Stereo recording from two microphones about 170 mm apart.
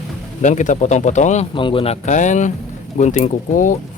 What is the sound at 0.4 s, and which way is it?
Speech, 45° left (ahead or behind).